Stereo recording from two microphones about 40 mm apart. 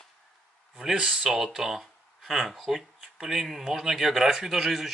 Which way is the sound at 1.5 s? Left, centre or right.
Centre.